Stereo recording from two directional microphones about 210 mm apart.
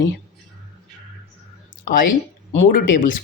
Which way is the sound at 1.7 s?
45° left (ahead or behind).